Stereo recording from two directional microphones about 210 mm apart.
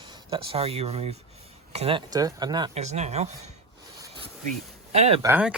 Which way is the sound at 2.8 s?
30° right (ahead or behind).